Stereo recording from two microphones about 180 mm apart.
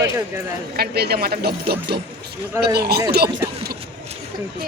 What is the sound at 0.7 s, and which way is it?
Speech, 60° right (ahead or behind).